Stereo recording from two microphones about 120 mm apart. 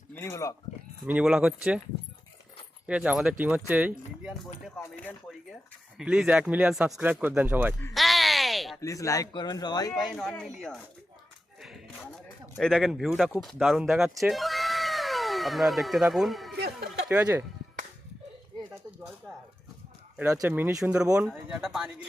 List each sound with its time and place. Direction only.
0.1 s speech: 20° left (ahead or behind)
1.0 s speech: 10° right (ahead or behind)
2.8 s speech: 10° right (ahead or behind)
6.0 s speech: 5° right (ahead or behind)
7.9 s a sound: centre (ahead or behind)
8.8 s a man's voice: 25° left (ahead or behind)
9.9 s speech: centre (ahead or behind)
12.5 s speech: centre (ahead or behind)
13.9 s cat: centre (ahead or behind)
17.2 s speech: 25° right (ahead or behind)
20.5 s speech: 15° right (ahead or behind)